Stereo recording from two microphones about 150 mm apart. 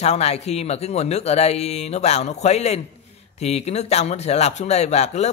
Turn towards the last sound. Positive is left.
turn(degrees=50)  # may be behind; listen again after turning